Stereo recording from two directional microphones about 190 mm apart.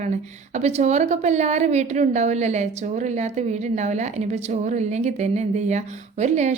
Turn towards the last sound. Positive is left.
turn(degrees=-35)  # may be behind; listen again after turning